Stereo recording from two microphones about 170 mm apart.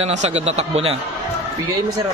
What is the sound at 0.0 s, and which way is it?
Speech, 40° right (ahead or behind).